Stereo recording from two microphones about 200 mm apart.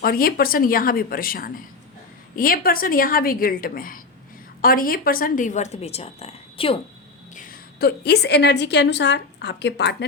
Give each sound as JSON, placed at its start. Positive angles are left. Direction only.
{"t": 0.0, "sound": "a woman's voice", "side_deg": 45}
{"t": 7.3, "sound": "a woman's voice", "side_deg": 45}